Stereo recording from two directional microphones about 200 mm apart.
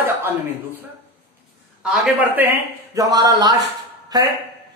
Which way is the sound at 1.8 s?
5° right (ahead or behind).